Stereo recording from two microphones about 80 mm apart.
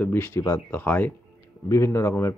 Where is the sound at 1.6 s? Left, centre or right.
Left.